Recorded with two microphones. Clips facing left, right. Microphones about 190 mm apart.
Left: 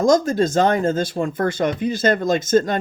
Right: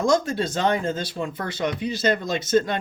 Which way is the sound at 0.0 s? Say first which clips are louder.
Left 5 dB; 40° left (ahead or behind).